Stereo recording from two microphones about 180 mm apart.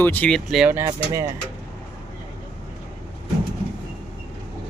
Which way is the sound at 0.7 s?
15° right (ahead or behind).